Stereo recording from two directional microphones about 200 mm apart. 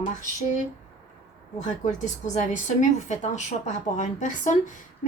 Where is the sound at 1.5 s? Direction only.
35° left (ahead or behind).